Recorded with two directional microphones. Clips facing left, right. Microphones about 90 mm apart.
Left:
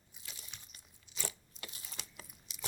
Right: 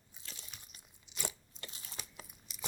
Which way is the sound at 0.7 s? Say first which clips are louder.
Right 1 dB; 5° right (ahead or behind).